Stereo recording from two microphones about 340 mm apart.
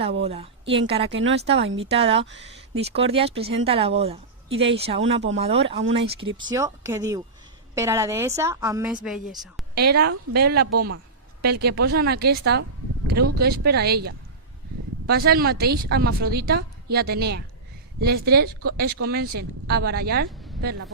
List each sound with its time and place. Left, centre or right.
0.0 s a woman's voice: centre
1.1 s speech: right
2.0 s a woman's voice: centre
2.2 s speech: right
2.7 s a woman's voice: centre
4.4 s a woman's voice: right
4.7 s a woman's voice: centre
9.7 s a woman's voice: right